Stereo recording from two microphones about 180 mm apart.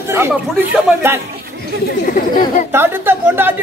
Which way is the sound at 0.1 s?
10° right (ahead or behind).